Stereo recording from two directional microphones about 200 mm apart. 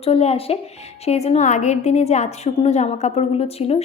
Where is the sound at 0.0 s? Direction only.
30° left (ahead or behind).